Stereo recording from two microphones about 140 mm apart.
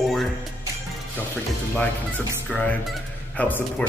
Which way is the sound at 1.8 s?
10° left (ahead or behind).